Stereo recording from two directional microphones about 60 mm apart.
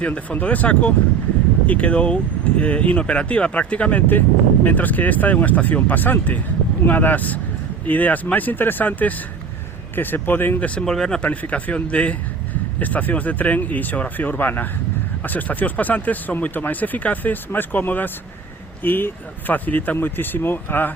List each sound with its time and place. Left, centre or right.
0.0 s speech: left
10.8 s speech: centre
11.3 s speech: left